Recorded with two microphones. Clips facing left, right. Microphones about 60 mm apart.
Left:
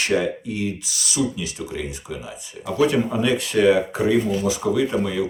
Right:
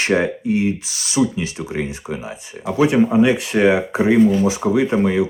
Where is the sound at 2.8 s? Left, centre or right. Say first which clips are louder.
Right 6 dB; right.